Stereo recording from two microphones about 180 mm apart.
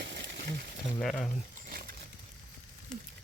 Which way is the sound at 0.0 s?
70° right (ahead or behind).